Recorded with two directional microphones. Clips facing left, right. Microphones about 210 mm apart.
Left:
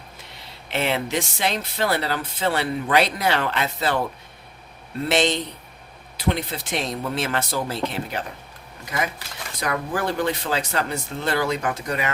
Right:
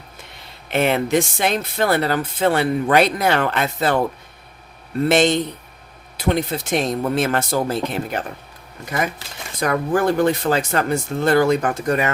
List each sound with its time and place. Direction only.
0.7 s speech: 50° right (ahead or behind)
5.0 s speech: 50° right (ahead or behind)
9.6 s speech: 50° right (ahead or behind)